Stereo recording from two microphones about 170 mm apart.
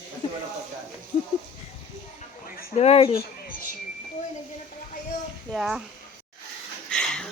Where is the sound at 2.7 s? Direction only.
35° left (ahead or behind).